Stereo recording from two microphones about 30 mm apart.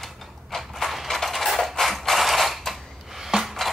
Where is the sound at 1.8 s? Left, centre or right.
Centre.